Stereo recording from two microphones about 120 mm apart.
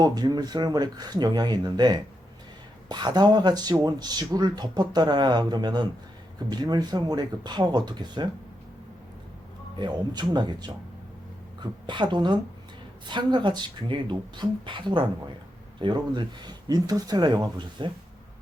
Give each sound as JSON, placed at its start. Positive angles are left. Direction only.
{"t": 0.0, "sound": "speech", "side_deg": -35}
{"t": 9.7, "sound": "speech", "side_deg": -35}